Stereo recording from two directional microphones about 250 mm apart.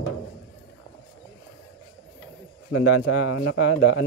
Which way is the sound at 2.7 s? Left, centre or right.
Left.